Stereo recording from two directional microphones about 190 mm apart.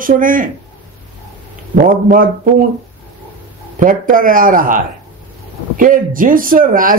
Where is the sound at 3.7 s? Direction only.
45° right (ahead or behind).